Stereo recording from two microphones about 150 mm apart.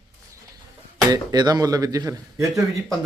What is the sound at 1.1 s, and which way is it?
Speech, 25° right (ahead or behind).